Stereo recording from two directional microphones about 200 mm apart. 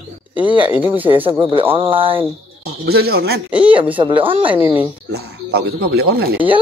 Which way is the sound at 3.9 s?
25° right (ahead or behind).